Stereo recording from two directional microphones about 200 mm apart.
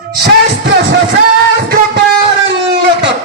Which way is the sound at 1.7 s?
55° right (ahead or behind).